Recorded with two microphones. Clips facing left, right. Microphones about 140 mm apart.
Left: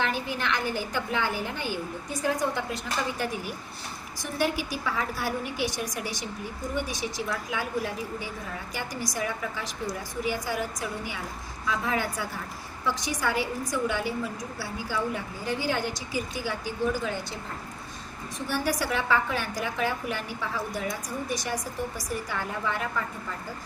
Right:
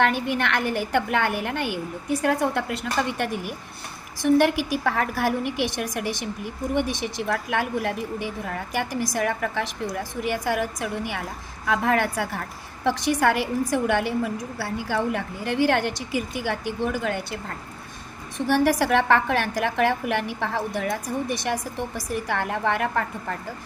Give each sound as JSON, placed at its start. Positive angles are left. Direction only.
{"t": 0.0, "sound": "a woman's voice", "side_deg": -65}
{"t": 4.4, "sound": "a woman's voice", "side_deg": -70}
{"t": 11.6, "sound": "a woman's voice", "side_deg": -70}
{"t": 18.3, "sound": "a woman's voice", "side_deg": -65}
{"t": 22.3, "sound": "a woman's voice", "side_deg": -75}